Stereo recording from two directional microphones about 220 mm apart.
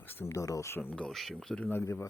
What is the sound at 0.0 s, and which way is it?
Speech, 10° left (ahead or behind).